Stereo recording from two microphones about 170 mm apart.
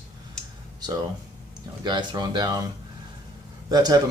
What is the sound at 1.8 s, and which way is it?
Speech, 25° right (ahead or behind).